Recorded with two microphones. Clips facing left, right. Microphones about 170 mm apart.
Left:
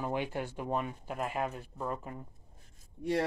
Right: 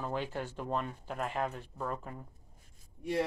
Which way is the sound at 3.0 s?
65° left (ahead or behind).